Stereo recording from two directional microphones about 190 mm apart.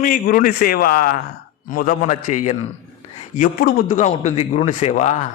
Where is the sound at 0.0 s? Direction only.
45° left (ahead or behind).